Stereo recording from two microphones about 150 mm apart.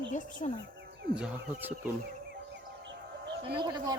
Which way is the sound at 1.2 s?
10° right (ahead or behind).